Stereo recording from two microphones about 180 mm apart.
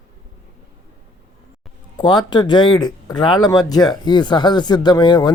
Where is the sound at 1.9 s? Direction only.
25° left (ahead or behind).